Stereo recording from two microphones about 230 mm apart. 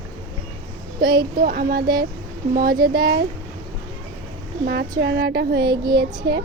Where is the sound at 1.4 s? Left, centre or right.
Right.